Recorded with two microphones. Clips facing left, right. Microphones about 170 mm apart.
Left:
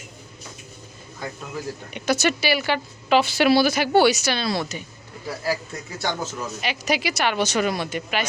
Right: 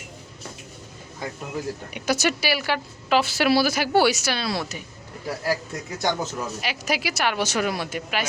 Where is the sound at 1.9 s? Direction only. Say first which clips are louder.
Left 2 dB; 10° right (ahead or behind).